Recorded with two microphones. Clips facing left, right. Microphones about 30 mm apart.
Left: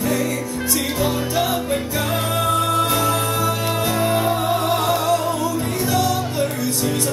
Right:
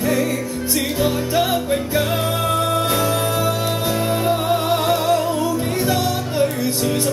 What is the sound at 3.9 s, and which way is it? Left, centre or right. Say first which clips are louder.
Music: left 1 dB; centre.